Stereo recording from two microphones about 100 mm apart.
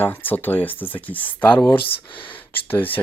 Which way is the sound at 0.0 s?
20° left (ahead or behind).